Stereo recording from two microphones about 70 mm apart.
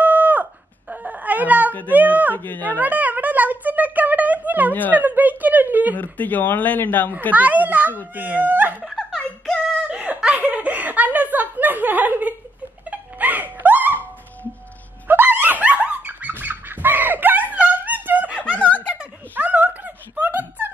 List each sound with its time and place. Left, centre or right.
0.0 s a sound: right
1.9 s speech: right
2.3 s a man's voice: left
2.8 s a sound: right
4.9 s speech: right
5.9 s a man's voice: left
7.3 s speech: right
8.8 s giggle: centre
10.0 s chuckle: right
12.9 s music: right
15.0 s dog: right
18.6 s a sound: left
18.9 s a sound: right